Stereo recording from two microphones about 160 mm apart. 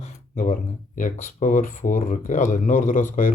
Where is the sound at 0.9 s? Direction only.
55° left (ahead or behind).